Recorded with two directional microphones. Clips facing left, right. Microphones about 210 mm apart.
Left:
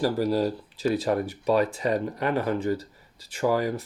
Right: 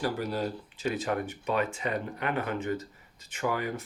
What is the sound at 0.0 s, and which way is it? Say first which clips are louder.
Speech: left 7 dB; 40° left (ahead or behind).